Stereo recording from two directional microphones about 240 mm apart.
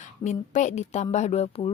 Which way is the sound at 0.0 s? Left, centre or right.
Left.